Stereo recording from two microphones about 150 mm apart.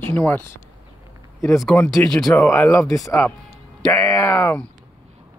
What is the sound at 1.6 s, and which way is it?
Speech, 5° left (ahead or behind).